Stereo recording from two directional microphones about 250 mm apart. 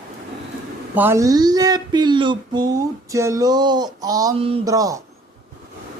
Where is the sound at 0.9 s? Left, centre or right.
Centre.